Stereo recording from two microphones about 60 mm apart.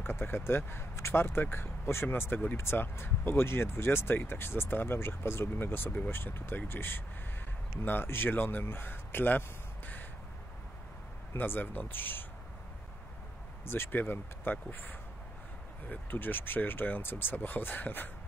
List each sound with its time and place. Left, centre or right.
0.0 s speech: left
11.3 s speech: left
13.7 s speech: left